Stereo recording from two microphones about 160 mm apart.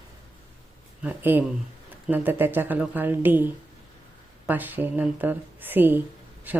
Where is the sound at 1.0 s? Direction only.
10° right (ahead or behind).